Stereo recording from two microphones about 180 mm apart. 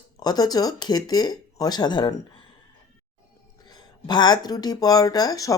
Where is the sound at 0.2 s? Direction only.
20° left (ahead or behind).